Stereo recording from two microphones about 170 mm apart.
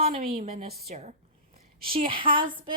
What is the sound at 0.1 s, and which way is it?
Speech, 55° right (ahead or behind).